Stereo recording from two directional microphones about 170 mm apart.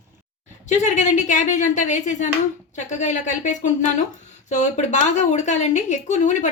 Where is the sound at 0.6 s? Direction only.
45° left (ahead or behind).